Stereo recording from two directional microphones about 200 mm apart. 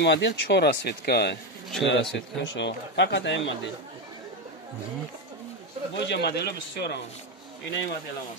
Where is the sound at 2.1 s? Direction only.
65° left (ahead or behind).